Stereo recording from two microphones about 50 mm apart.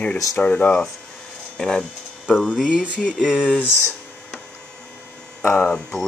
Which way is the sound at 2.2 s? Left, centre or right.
Centre.